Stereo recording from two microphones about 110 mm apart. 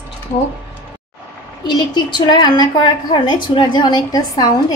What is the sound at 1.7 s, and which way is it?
A woman's voice, 40° left (ahead or behind).